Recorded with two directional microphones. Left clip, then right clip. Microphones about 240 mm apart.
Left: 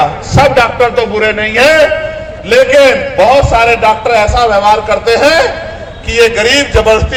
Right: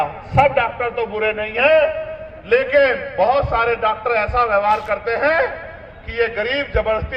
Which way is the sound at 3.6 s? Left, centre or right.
Left.